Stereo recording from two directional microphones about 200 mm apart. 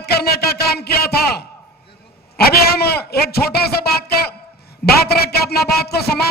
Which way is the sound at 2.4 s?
50° left (ahead or behind).